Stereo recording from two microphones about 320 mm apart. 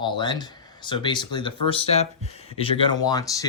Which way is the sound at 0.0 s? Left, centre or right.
Centre.